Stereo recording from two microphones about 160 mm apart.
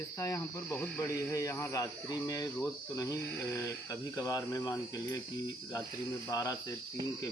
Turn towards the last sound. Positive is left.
turn(degrees=20)  # may be behind; listen again after turning